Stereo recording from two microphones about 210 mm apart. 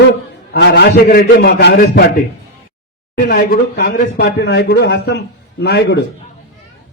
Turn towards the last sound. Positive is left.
turn(degrees=50)  # may be behind; listen again after turning